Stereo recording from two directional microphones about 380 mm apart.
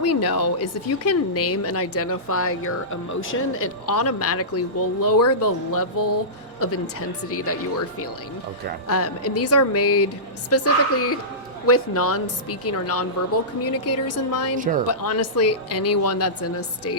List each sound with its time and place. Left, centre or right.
0.0 s speech: left
4.9 s music: left
5.2 s speech: left
5.7 s music: left
6.6 s speech: left
14.6 s speech: right
14.8 s speech: left